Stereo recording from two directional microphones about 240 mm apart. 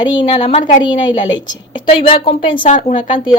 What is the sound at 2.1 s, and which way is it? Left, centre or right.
Speech, left.